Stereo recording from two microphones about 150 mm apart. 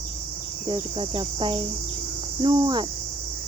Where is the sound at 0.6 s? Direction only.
30° right (ahead or behind).